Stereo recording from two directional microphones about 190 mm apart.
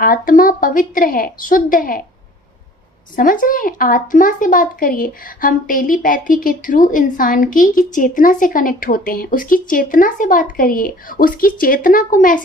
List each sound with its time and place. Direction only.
0.0 s speech: 50° left (ahead or behind)
3.2 s speech: 50° left (ahead or behind)